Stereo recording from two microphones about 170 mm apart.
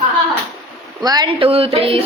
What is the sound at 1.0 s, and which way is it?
Speech, 25° right (ahead or behind).